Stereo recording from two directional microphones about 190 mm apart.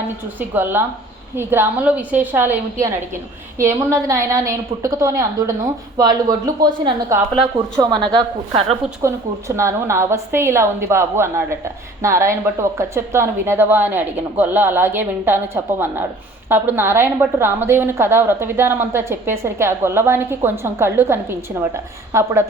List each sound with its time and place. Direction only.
0.3 s a woman's voice: 10° right (ahead or behind); by 8.8 s 25° right (ahead or behind)
9.0 s a woman's voice: 15° right (ahead or behind)